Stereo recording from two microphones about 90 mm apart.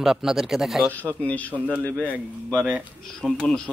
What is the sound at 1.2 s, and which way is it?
Speech, 15° left (ahead or behind).